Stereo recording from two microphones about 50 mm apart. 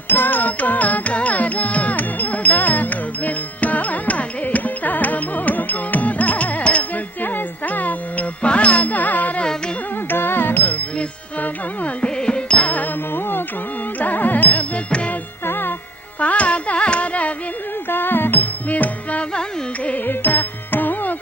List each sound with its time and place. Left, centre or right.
0.1 s music: left
10.1 s music: left
12.0 s music: centre
12.6 s music: left
14.6 s music: left
15.4 s music: left
16.2 s carnatic music: left
17.8 s music: left
19.3 s carnatic music: left
20.1 s music: left